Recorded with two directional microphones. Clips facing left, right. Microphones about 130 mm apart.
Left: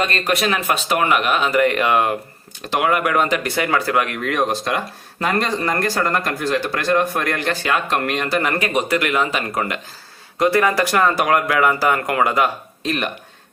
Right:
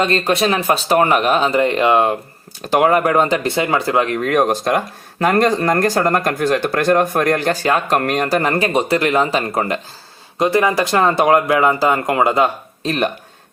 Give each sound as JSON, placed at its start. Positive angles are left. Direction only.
{"t": 0.0, "sound": "speech", "side_deg": -30}
{"t": 2.6, "sound": "speech", "side_deg": -40}
{"t": 4.2, "sound": "speech", "side_deg": -45}
{"t": 10.3, "sound": "speech", "side_deg": -20}